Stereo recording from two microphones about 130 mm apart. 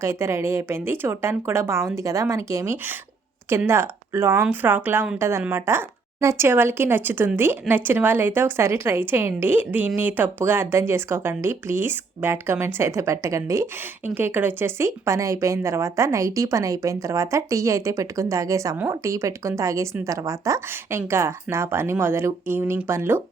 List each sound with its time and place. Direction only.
0.0 s a woman's voice: 20° right (ahead or behind)